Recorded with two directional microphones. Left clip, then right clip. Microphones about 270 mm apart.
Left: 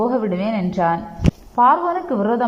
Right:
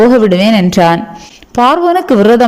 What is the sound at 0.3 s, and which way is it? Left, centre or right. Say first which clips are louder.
A man's voice: right 13 dB; right.